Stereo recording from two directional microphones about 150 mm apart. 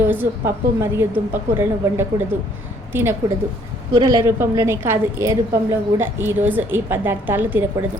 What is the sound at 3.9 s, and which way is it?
Speech, 30° right (ahead or behind).